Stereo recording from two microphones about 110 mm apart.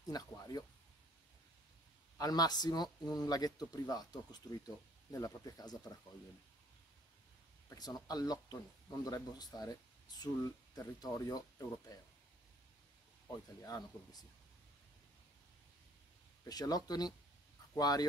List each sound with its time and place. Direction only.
0.0 s speech: 35° left (ahead or behind)
2.1 s speech: 35° left (ahead or behind)
7.7 s speech: 35° left (ahead or behind)
13.6 s speech: 35° left (ahead or behind)
16.4 s speech: 35° left (ahead or behind)